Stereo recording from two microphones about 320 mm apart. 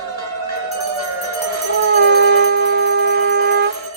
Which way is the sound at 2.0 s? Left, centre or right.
Right.